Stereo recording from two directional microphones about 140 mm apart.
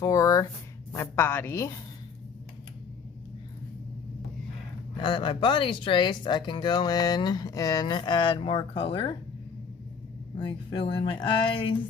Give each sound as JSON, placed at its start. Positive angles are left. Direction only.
{"t": 0.0, "sound": "a woman's voice", "side_deg": 25}
{"t": 4.9, "sound": "speech", "side_deg": 35}
{"t": 10.3, "sound": "speech", "side_deg": 35}